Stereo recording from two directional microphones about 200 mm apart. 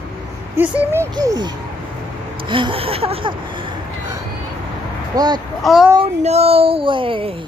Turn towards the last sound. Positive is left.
turn(degrees=-25)  # may be behind; listen again after turning